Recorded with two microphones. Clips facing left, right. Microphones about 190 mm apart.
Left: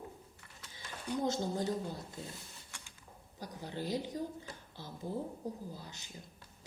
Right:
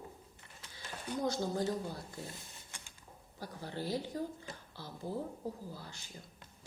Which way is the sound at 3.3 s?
15° left (ahead or behind).